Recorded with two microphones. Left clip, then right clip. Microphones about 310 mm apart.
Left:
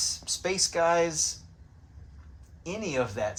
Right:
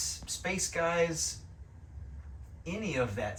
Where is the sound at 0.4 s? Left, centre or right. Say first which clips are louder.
Left 6 dB; centre.